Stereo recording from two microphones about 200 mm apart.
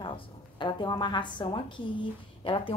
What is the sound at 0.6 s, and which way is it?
A woman's voice, 25° left (ahead or behind).